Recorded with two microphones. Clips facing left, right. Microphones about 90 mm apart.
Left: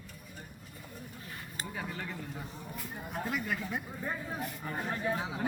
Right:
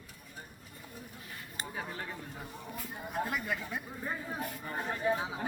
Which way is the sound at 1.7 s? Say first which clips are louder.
Left 1 dB; 20° right (ahead or behind).